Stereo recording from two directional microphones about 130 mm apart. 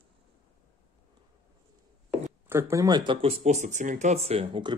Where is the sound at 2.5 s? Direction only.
20° right (ahead or behind).